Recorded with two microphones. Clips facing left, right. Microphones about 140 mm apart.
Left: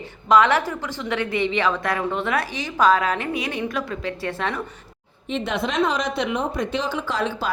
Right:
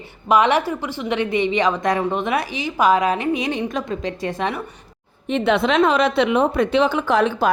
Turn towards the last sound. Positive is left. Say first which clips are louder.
# right 7 dB
turn(degrees=-60)  # may be behind; listen again after turning